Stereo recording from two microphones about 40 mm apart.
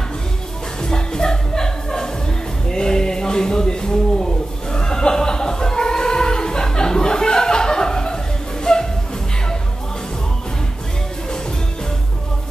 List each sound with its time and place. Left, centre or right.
0.8 s music: centre
2.7 s a sound: centre
8.7 s music: centre